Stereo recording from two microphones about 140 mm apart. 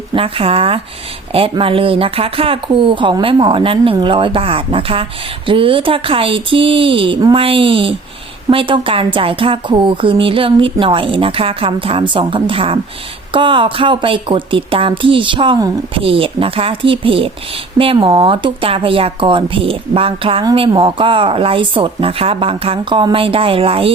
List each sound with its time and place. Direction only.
0.1 s a woman's voice: 40° right (ahead or behind)